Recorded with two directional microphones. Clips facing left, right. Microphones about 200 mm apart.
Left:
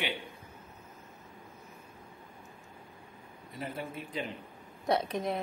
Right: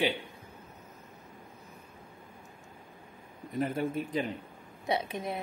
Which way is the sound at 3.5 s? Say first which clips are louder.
Right 8 dB; 50° right (ahead or behind).